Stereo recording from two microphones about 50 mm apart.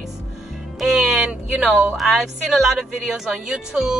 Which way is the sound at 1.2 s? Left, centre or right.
Centre.